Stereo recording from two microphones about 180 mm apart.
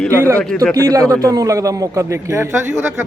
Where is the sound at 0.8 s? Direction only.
20° right (ahead or behind).